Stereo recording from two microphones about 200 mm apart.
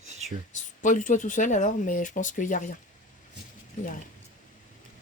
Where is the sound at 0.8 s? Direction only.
40° left (ahead or behind).